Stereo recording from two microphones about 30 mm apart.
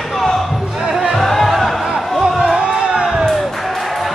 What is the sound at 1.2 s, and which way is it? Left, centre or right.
Music, centre.